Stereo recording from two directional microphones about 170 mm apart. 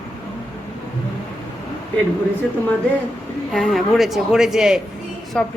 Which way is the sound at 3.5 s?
Centre (ahead or behind).